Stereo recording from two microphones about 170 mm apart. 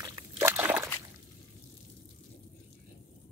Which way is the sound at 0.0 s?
15° right (ahead or behind).